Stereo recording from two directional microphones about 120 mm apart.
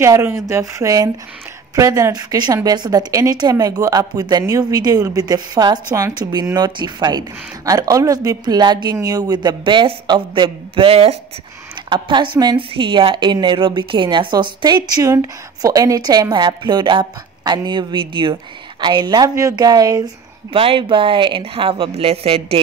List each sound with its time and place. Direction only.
0.0 s speech: 25° right (ahead or behind); by 11.1 s 55° right (ahead or behind)
11.9 s speech: 40° right (ahead or behind)
20.5 s a woman's voice: 45° right (ahead or behind)